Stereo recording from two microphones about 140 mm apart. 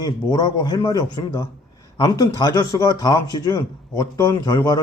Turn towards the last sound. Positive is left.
turn(degrees=25)  # may be behind; listen again after turning